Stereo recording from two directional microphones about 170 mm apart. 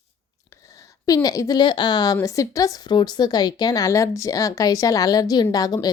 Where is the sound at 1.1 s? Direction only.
20° left (ahead or behind).